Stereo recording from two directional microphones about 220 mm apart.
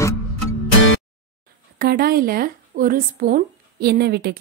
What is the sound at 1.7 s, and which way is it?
Speech, 45° right (ahead or behind).